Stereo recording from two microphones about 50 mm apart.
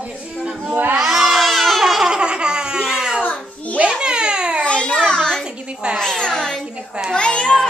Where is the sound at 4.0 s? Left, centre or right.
Centre.